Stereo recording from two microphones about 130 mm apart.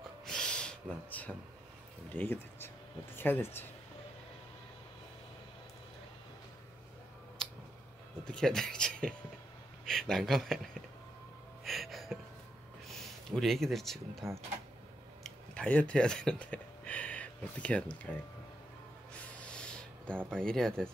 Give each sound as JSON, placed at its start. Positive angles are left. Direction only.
{"t": 0.2, "sound": "owl", "side_deg": 5}
{"t": 2.1, "sound": "speech", "side_deg": 15}
{"t": 7.4, "sound": "tick", "side_deg": 5}
{"t": 8.3, "sound": "speech", "side_deg": 5}
{"t": 11.6, "sound": "music", "side_deg": 0}
{"t": 12.9, "sound": "speech", "side_deg": 0}
{"t": 15.2, "sound": "speech", "side_deg": 10}
{"t": 19.4, "sound": "snort", "side_deg": 5}
{"t": 20.2, "sound": "speech", "side_deg": 5}